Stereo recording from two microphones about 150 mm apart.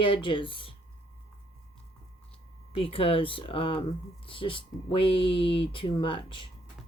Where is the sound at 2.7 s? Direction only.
40° left (ahead or behind).